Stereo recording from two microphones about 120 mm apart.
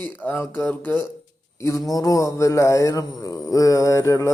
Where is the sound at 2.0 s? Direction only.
25° left (ahead or behind).